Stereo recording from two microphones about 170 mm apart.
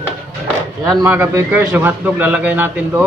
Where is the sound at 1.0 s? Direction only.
15° right (ahead or behind).